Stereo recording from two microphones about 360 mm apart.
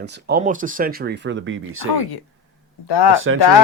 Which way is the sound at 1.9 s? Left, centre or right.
Left.